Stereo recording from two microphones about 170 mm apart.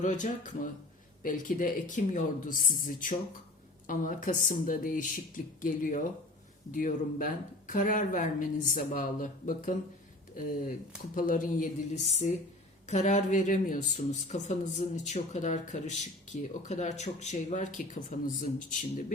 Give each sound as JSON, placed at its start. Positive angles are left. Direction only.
{"t": 0.0, "sound": "speech", "side_deg": 45}
{"t": 11.1, "sound": "speech", "side_deg": 50}